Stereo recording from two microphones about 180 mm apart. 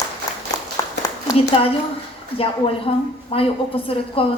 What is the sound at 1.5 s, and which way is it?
Speech, 30° left (ahead or behind).